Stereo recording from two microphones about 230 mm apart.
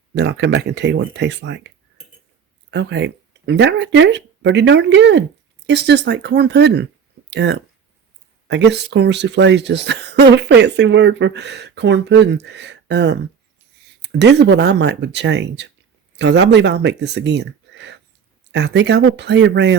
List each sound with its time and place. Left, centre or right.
0.1 s speech: right